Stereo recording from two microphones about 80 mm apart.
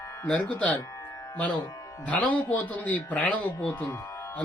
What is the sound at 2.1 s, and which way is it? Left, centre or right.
Speech, centre.